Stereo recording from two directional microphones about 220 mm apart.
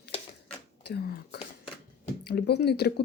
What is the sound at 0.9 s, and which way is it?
Whispering, 45° left (ahead or behind).